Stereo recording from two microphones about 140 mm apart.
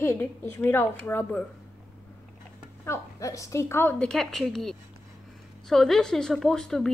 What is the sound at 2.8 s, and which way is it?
A woman's voice, 20° left (ahead or behind).